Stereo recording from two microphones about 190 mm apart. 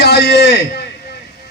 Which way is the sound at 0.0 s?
55° left (ahead or behind).